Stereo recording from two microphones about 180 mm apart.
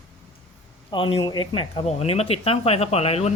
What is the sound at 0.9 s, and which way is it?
Speech, 30° left (ahead or behind).